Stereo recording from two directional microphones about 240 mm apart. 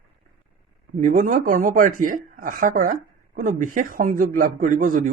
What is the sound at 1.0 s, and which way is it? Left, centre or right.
A man's voice, right.